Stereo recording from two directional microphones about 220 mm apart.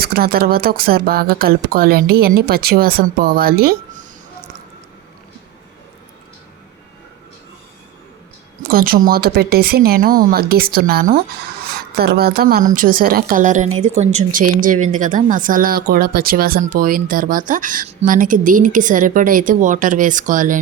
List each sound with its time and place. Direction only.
0.0 s speech: 45° right (ahead or behind)
8.6 s speech: 40° right (ahead or behind)